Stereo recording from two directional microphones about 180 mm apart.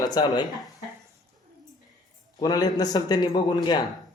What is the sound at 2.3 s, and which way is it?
A man's voice, 20° left (ahead or behind).